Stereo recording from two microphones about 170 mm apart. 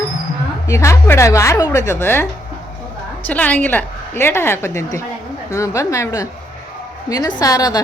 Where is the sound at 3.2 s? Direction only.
10° left (ahead or behind).